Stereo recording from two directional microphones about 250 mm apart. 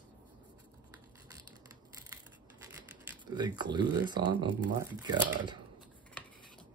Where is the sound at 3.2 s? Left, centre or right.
Centre.